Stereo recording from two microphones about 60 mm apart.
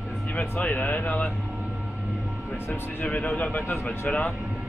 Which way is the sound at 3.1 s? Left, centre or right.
Left.